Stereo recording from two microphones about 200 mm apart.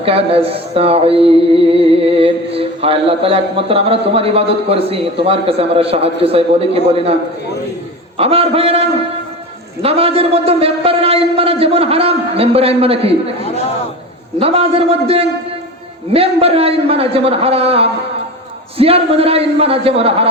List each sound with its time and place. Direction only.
0.0 s speech: 30° right (ahead or behind)
8.2 s speech: 30° right (ahead or behind)
9.8 s speech: 30° right (ahead or behind)
14.3 s speech: 30° right (ahead or behind)